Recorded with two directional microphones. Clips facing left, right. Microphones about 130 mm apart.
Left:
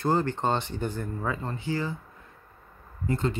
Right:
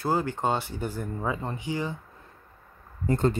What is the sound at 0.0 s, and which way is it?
Speech, 10° right (ahead or behind).